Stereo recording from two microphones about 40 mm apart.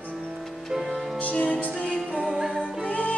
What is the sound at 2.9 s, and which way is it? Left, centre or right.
Music, left.